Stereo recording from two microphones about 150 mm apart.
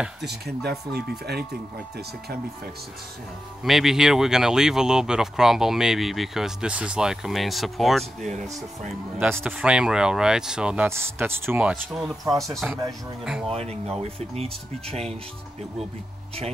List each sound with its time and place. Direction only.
0.2 s speech: 90° right
3.6 s speech: centre (ahead or behind)
9.2 s speech: 10° right (ahead or behind)
11.7 s speech: centre (ahead or behind)
13.5 s speech: 40° right (ahead or behind)